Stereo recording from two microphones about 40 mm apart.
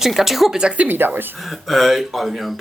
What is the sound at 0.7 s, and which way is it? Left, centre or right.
Speech, right.